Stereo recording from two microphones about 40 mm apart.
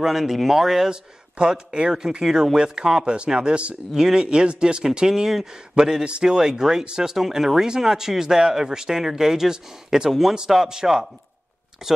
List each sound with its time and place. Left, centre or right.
0.0 s speech: centre
1.4 s speech: right
3.2 s speech: right
3.9 s speech: centre